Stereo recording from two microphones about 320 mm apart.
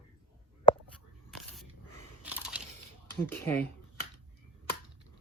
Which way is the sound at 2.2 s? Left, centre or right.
Centre.